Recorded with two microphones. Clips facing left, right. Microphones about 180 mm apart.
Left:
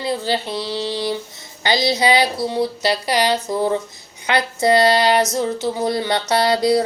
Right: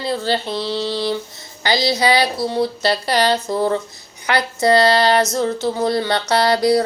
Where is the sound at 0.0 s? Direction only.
15° left (ahead or behind).